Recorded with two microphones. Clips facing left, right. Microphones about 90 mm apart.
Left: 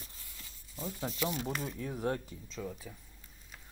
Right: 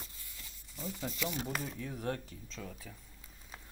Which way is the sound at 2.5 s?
5° left (ahead or behind).